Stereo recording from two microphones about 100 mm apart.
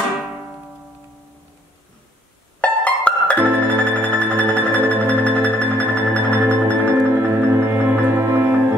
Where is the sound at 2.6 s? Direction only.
10° left (ahead or behind).